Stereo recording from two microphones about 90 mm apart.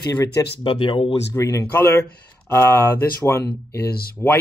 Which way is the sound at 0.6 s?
65° left (ahead or behind).